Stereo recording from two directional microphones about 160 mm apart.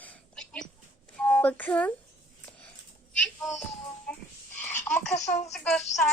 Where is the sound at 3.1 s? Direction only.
5° left (ahead or behind).